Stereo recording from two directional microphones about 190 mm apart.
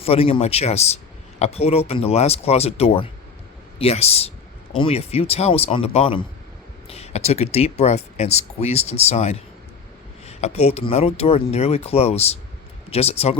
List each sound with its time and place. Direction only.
0.0 s speech: 30° left (ahead or behind)